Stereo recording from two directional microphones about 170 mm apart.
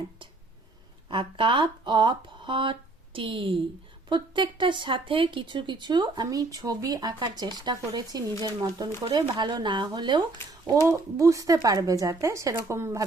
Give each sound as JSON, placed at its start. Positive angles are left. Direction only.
{"t": 1.0, "sound": "speech", "side_deg": -30}